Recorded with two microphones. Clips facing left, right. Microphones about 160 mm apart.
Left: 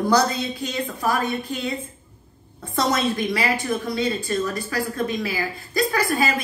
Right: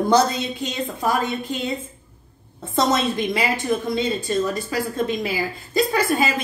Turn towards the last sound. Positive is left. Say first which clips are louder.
# right 1 dB
turn(degrees=-20)  # may be behind; listen again after turning